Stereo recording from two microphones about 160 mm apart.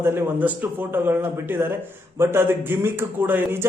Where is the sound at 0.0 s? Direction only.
15° right (ahead or behind).